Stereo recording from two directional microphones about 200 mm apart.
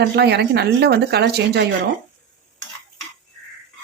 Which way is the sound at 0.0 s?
55° right (ahead or behind).